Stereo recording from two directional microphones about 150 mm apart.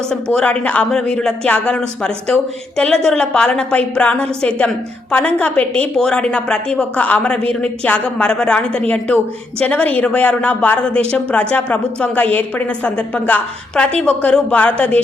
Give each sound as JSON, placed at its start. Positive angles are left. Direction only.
{"t": 0.1, "sound": "speech", "side_deg": 5}